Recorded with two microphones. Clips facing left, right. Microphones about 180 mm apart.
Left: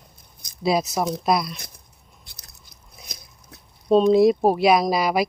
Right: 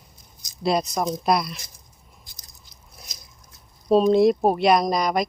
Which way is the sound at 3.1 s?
60° left (ahead or behind).